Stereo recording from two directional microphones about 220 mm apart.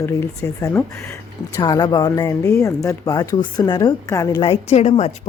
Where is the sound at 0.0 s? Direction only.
10° left (ahead or behind).